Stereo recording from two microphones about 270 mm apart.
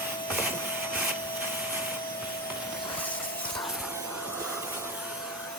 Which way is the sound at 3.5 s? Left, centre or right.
Centre.